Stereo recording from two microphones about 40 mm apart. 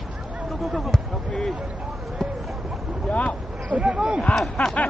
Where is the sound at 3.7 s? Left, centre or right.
Right.